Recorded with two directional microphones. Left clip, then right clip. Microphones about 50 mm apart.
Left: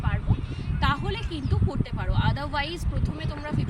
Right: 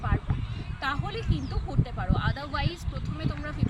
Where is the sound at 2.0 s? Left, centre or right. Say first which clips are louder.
Left 2 dB; right.